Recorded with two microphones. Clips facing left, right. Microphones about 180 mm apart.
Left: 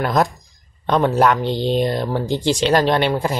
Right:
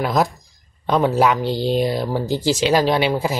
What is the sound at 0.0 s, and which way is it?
Speech, centre (ahead or behind).